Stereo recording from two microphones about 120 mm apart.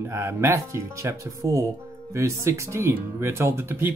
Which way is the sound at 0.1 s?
20° right (ahead or behind).